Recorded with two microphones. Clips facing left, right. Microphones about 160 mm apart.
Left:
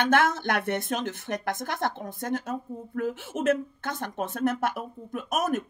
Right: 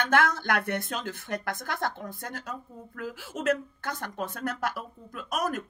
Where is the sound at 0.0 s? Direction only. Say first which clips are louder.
Left 2 dB; 25° left (ahead or behind).